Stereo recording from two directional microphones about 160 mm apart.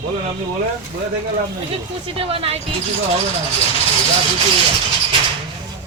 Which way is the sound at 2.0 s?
35° right (ahead or behind).